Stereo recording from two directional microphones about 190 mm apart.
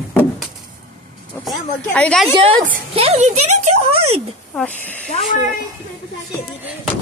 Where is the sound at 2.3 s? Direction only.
30° right (ahead or behind).